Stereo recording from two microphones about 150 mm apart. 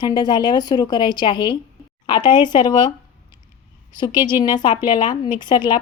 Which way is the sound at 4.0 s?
30° left (ahead or behind).